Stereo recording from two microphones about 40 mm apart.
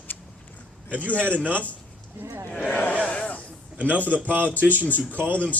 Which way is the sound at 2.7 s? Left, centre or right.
Left.